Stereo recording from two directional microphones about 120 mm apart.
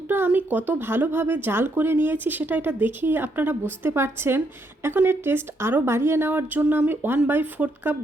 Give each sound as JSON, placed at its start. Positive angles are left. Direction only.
{"t": 0.1, "sound": "speech", "side_deg": -15}